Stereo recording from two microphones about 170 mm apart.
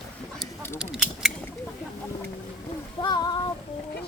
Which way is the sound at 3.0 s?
30° left (ahead or behind).